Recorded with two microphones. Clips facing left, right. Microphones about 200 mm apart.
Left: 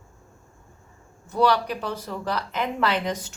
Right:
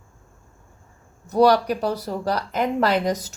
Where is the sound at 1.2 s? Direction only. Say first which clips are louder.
Right 5 dB; 40° right (ahead or behind).